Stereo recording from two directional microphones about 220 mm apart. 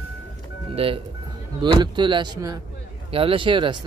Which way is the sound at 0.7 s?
25° right (ahead or behind).